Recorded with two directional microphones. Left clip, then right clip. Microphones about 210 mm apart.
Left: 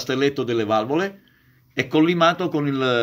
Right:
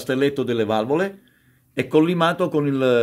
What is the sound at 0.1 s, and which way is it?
Speech, 35° right (ahead or behind).